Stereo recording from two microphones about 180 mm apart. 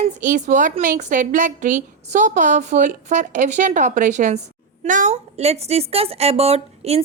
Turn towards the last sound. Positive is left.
turn(degrees=-35)  # may be behind; listen again after turning